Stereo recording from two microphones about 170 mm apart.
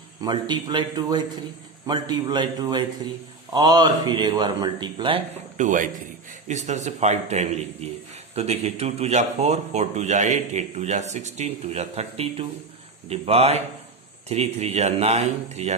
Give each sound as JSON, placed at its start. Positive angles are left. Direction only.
{"t": 0.2, "sound": "speech", "side_deg": -25}
{"t": 5.5, "sound": "a man's voice", "side_deg": -50}